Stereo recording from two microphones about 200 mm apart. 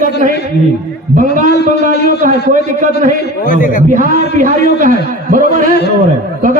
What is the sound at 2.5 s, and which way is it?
Speech, 40° right (ahead or behind).